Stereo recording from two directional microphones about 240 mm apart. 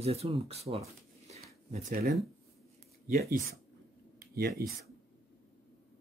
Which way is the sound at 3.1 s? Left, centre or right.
Right.